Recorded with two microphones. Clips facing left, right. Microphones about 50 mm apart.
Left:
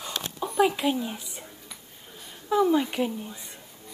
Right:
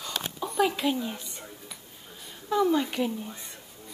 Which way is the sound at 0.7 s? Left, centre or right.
Centre.